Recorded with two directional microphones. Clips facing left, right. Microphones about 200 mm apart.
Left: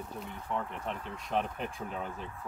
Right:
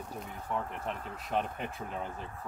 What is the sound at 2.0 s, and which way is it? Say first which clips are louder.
Speech: left 1 dB; 35° right (ahead or behind).